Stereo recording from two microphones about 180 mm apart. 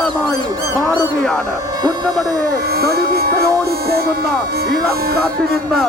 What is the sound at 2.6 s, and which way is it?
Speech, 60° right (ahead or behind).